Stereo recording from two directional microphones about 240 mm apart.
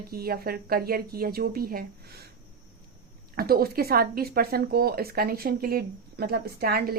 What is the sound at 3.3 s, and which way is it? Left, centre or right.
Speech, right.